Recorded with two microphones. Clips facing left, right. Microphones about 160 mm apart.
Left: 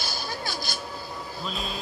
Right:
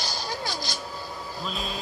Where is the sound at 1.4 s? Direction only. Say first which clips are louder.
Right 1 dB; centre (ahead or behind).